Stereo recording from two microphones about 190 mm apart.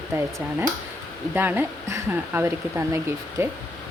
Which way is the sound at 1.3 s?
10° right (ahead or behind).